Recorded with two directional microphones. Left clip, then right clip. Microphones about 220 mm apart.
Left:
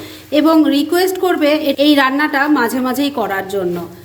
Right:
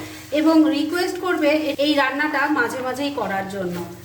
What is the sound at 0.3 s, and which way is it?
A woman's voice, 50° left (ahead or behind).